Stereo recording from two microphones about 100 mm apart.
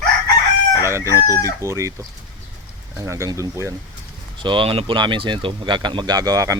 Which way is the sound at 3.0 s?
30° right (ahead or behind).